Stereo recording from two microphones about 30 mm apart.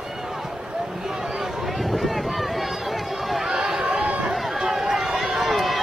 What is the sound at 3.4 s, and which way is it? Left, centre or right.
Run, centre.